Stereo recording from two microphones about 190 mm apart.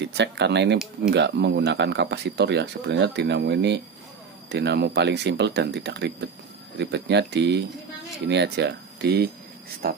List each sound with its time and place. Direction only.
0.0 s speech: 65° right (ahead or behind)